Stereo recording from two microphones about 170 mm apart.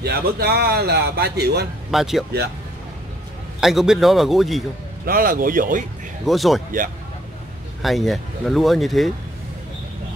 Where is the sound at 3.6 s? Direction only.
Centre (ahead or behind).